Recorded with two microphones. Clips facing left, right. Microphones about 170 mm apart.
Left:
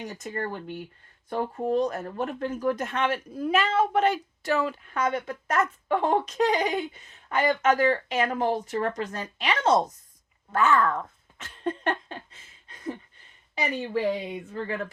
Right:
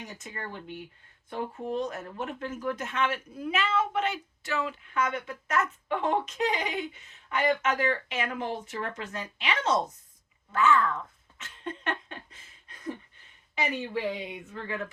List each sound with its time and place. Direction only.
0.2 s speech: 45° left (ahead or behind)
10.5 s a sound: 40° left (ahead or behind)
13.6 s speech: 35° left (ahead or behind)